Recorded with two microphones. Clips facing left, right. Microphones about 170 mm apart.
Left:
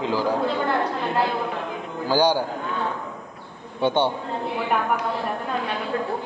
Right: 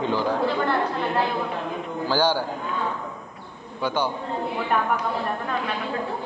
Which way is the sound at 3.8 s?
25° left (ahead or behind).